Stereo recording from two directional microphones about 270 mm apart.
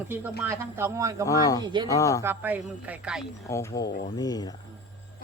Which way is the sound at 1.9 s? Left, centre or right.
Centre.